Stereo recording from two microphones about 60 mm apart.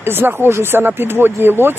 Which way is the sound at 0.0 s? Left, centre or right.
Right.